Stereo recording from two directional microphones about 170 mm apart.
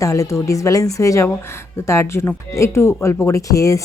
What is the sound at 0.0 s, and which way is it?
Speech, 20° left (ahead or behind).